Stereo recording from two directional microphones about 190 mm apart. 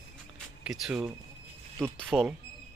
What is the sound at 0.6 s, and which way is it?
Speech, 5° right (ahead or behind).